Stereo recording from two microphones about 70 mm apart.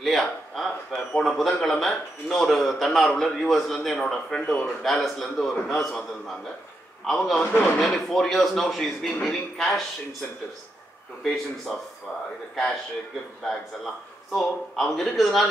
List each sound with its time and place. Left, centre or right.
0.0 s a man's voice: centre
11.2 s speech: centre
14.3 s a man's voice: centre